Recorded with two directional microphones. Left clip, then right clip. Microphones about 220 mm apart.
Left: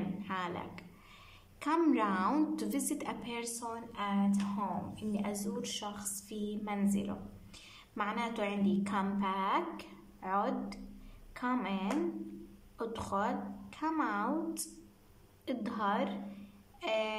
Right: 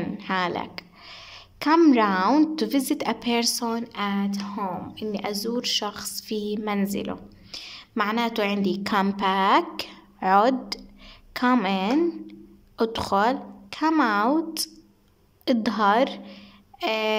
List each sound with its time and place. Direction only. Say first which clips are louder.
0.2 s a woman's voice: right 14 dB; 45° right (ahead or behind)